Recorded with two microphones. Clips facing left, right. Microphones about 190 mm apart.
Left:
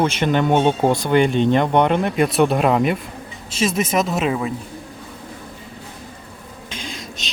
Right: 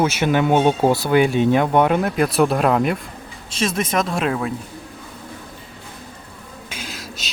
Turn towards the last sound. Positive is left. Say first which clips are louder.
# left 1 dB
turn(degrees=-5)  # may be behind; listen again after turning